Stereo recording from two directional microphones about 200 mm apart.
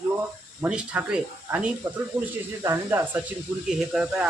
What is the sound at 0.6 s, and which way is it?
Speech, 5° right (ahead or behind).